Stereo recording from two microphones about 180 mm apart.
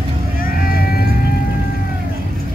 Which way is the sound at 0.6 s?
55° left (ahead or behind).